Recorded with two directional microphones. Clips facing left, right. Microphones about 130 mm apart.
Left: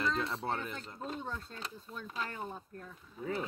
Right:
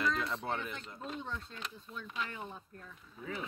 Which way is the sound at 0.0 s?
30° left (ahead or behind).